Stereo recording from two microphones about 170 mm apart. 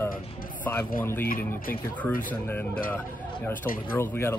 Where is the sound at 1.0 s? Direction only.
15° left (ahead or behind).